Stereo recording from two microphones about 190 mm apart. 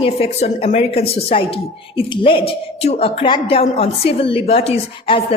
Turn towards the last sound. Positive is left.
turn(degrees=30)  # may be behind; listen again after turning